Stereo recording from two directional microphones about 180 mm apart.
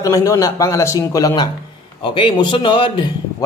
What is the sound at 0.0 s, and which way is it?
A man's voice, 20° left (ahead or behind).